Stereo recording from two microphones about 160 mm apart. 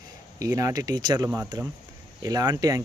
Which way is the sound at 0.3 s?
20° right (ahead or behind).